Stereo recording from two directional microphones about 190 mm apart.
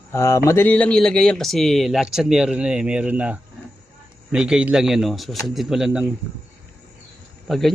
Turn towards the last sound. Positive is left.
turn(degrees=0)  # may be behind; listen again after turning